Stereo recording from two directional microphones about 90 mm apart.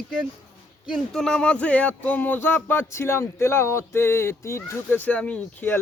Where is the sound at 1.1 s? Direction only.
5° left (ahead or behind); by 4.8 s 30° left (ahead or behind).